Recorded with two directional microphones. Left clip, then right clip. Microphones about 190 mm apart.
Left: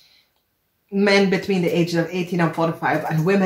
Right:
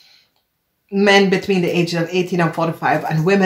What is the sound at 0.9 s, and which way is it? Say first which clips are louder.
Speech: right 4 dB; 35° right (ahead or behind).